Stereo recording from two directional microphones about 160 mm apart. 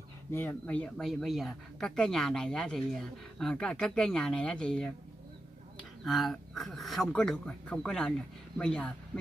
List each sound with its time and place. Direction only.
0.3 s speech: 10° left (ahead or behind)
6.0 s speech: centre (ahead or behind)